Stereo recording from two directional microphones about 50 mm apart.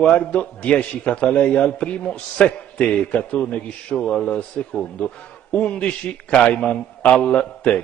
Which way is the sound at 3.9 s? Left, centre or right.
Centre.